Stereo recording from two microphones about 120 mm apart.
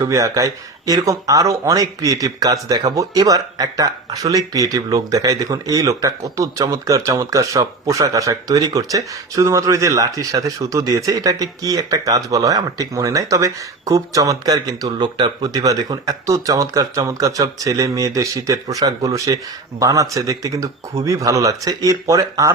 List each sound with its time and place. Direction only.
0.0 s speech: 25° right (ahead or behind)